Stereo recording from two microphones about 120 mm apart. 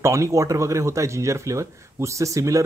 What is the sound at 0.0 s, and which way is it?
Speech, 25° right (ahead or behind).